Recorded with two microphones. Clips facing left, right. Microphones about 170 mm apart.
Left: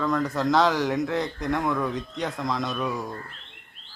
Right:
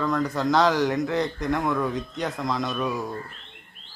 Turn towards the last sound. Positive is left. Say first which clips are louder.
# right 1 dB
turn(degrees=0)  # may be behind; listen again after turning